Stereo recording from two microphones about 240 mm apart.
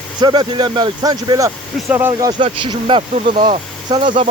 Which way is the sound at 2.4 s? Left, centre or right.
Right.